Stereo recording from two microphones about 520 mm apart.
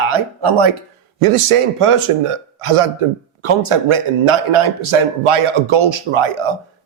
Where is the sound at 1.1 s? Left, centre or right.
Right.